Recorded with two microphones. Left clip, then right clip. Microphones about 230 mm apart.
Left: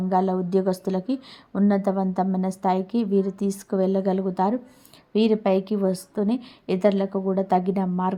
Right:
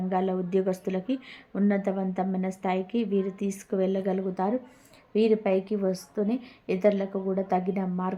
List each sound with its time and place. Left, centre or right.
0.1 s a woman's voice: left